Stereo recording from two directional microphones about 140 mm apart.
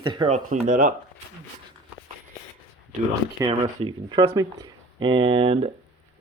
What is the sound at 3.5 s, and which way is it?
Speech, 40° right (ahead or behind).